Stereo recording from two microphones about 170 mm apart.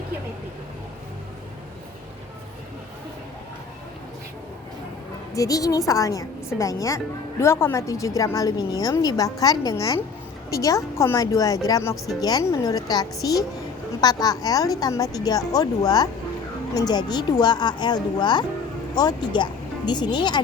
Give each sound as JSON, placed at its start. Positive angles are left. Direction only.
{"t": 5.3, "sound": "speech", "side_deg": 20}